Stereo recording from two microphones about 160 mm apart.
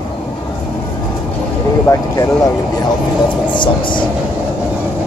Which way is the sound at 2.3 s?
20° left (ahead or behind).